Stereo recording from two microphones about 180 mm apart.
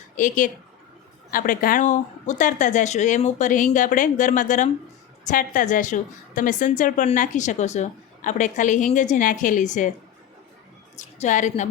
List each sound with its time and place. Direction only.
0.2 s a woman's voice: 45° left (ahead or behind)
10.9 s a woman's voice: 40° left (ahead or behind)